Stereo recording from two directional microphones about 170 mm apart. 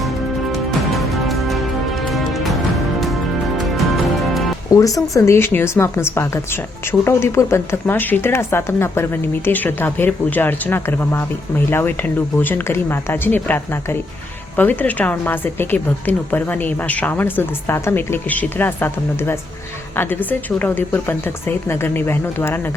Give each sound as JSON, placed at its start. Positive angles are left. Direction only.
{"t": 0.5, "sound": "music", "side_deg": 0}
{"t": 3.6, "sound": "music", "side_deg": 0}
{"t": 4.7, "sound": "a woman's voice", "side_deg": 20}